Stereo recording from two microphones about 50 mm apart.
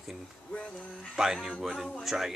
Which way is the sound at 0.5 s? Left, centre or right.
Left.